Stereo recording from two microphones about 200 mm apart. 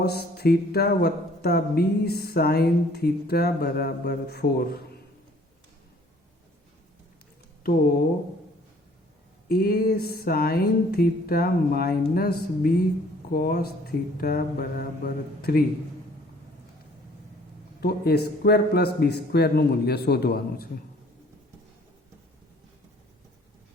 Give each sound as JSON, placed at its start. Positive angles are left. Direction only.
{"t": 0.0, "sound": "speech", "side_deg": 50}
{"t": 9.5, "sound": "speech", "side_deg": 50}
{"t": 17.7, "sound": "speech", "side_deg": 50}